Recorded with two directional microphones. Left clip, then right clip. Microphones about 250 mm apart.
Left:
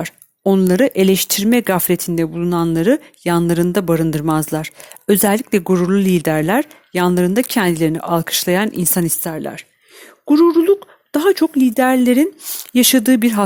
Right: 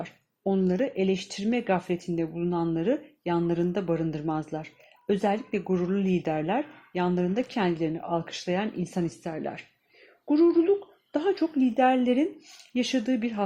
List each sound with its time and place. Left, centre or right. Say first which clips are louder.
0.0 s speech: left 12 dB; left